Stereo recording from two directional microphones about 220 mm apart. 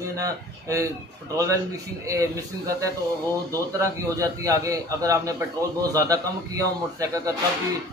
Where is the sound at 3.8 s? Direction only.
15° right (ahead or behind).